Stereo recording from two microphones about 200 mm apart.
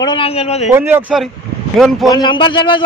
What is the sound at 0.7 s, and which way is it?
Speech, 10° right (ahead or behind).